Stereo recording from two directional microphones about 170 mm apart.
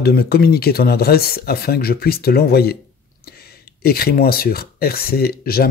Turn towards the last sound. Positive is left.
turn(degrees=65)  # may be behind; listen again after turning